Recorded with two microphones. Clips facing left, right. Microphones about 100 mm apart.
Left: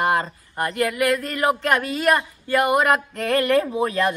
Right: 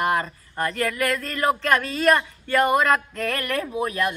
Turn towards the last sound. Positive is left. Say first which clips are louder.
# left 3 dB
turn(degrees=30)  # may be behind; listen again after turning